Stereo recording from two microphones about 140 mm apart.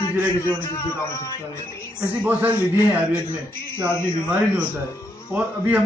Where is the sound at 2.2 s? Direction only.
10° right (ahead or behind).